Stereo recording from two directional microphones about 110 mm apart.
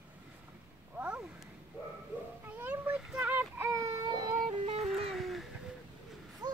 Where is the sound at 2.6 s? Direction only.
15° right (ahead or behind).